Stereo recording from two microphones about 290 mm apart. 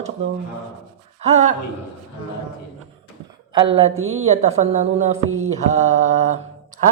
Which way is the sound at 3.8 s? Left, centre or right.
Right.